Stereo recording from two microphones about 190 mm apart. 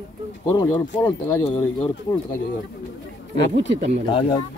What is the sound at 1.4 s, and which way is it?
Speech, 30° left (ahead or behind).